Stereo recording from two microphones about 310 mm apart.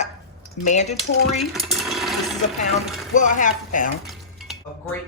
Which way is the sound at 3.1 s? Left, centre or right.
Left.